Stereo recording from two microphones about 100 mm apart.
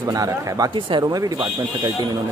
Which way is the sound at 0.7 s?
55° right (ahead or behind).